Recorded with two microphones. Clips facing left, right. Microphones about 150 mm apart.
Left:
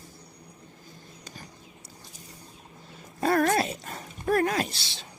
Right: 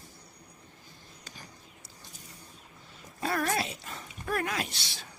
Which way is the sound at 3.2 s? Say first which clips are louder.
Left 7 dB; 45° left (ahead or behind).